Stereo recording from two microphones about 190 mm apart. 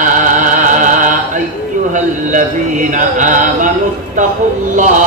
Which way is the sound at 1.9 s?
40° right (ahead or behind).